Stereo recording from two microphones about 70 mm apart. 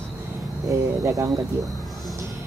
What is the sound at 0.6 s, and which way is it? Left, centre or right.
Speech, right.